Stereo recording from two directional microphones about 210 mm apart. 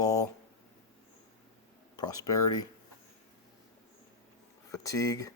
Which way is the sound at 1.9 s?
20° left (ahead or behind).